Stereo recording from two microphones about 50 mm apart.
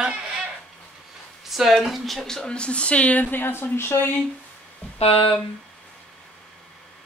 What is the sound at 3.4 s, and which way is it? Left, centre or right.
Speech, left.